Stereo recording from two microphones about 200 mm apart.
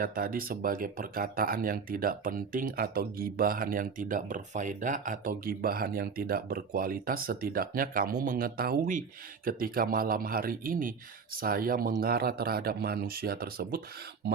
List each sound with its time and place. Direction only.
0.0 s speech: 45° right (ahead or behind)